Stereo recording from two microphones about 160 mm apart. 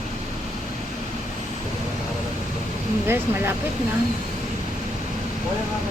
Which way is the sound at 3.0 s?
15° right (ahead or behind).